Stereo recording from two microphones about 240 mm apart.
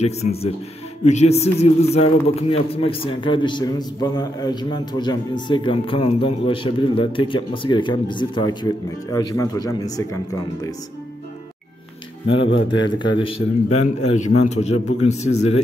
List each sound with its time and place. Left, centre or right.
0.0 s a man's voice: left
12.4 s speech: left
12.8 s a man's voice: centre